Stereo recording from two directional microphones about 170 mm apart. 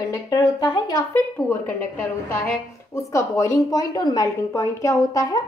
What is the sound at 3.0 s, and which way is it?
A woman's voice, 20° left (ahead or behind).